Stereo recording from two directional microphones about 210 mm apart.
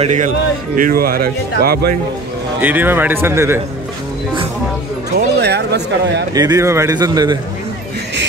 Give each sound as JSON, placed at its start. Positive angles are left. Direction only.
{"t": 0.0, "sound": "speech", "side_deg": -35}
{"t": 2.6, "sound": "a man's voice", "side_deg": -10}
{"t": 5.4, "sound": "speech", "side_deg": -50}
{"t": 6.3, "sound": "a man's voice", "side_deg": -15}